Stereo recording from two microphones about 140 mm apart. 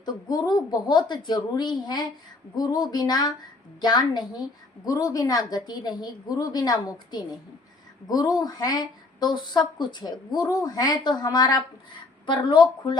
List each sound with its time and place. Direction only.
0.0 s a woman's voice: 30° left (ahead or behind)